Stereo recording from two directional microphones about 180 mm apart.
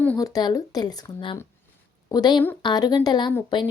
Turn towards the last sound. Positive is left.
turn(degrees=25)  # may be behind; listen again after turning